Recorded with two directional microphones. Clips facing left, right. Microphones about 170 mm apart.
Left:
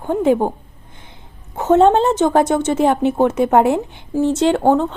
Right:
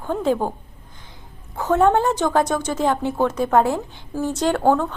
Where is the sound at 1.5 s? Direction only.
25° left (ahead or behind).